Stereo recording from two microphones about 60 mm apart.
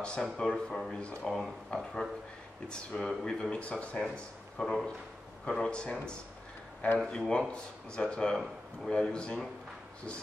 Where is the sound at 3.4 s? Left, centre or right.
Centre.